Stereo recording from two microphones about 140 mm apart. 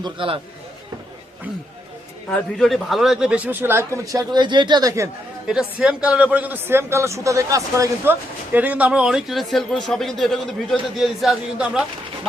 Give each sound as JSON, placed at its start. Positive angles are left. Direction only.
{"t": 0.0, "sound": "speech", "side_deg": -40}
{"t": 2.3, "sound": "a man's voice", "side_deg": 5}
{"t": 5.5, "sound": "a man's voice", "side_deg": -5}
{"t": 8.5, "sound": "speech", "side_deg": -10}